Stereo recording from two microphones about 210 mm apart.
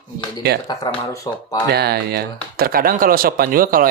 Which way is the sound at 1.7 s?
50° right (ahead or behind).